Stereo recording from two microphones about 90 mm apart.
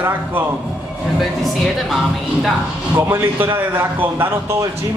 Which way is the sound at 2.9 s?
25° right (ahead or behind).